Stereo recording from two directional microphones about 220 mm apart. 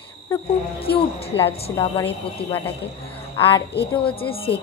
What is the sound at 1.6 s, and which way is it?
Speech, 25° left (ahead or behind).